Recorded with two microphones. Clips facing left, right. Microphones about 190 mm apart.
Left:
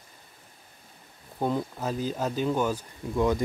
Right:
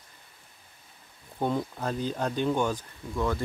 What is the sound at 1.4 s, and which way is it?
Speech, 5° left (ahead or behind).